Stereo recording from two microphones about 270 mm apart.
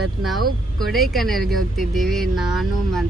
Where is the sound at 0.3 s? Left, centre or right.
Centre.